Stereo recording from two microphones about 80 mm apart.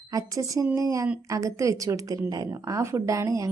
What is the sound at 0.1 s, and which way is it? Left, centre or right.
A woman's voice, right.